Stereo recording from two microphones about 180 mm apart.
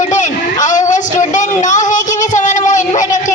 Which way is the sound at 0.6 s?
45° left (ahead or behind).